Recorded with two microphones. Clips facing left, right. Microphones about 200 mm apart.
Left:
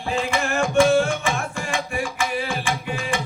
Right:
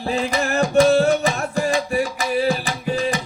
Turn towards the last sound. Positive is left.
turn(degrees=-40)  # may be behind; listen again after turning